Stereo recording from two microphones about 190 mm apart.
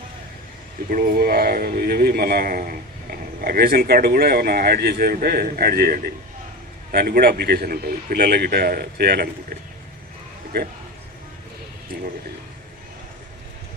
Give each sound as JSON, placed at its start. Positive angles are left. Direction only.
{"t": 0.9, "sound": "speech", "side_deg": -50}